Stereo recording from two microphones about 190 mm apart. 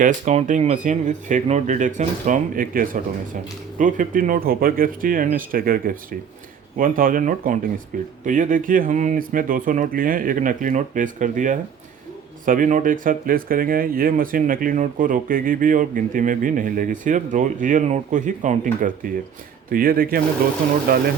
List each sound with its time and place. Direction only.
0.0 s speech: 40° right (ahead or behind)